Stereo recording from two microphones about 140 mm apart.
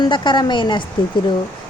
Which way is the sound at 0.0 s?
35° left (ahead or behind).